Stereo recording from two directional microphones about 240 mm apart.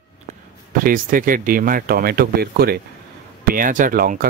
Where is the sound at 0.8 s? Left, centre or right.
Right.